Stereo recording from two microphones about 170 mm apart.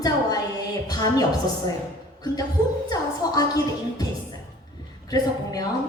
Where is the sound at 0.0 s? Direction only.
25° left (ahead or behind).